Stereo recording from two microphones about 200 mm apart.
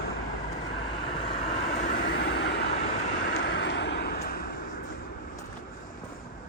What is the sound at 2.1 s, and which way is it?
Vehicle, 60° left (ahead or behind).